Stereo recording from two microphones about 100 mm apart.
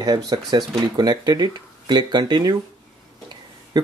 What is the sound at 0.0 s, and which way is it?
Speech, 40° right (ahead or behind).